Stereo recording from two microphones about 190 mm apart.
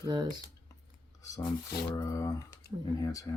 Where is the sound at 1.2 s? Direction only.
15° left (ahead or behind).